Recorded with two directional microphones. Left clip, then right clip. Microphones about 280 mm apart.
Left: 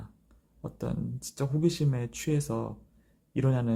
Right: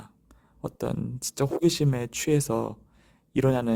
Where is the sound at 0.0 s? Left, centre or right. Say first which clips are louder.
Right 3 dB; right.